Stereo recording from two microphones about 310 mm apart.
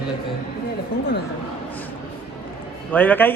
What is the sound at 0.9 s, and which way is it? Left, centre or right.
Speech, left.